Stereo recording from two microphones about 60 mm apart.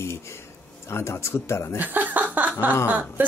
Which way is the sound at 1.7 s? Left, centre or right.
Right.